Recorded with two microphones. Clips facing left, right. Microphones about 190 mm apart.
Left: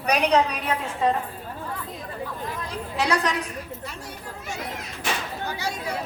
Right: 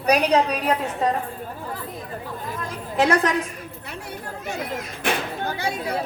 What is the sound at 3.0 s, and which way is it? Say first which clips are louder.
Speech: right 5 dB; 50° right (ahead or behind).